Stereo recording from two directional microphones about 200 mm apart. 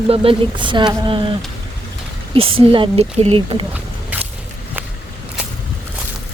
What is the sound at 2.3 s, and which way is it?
Speech, 25° right (ahead or behind).